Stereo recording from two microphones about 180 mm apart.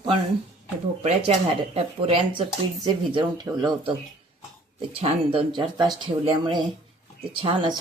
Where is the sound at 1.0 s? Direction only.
35° right (ahead or behind).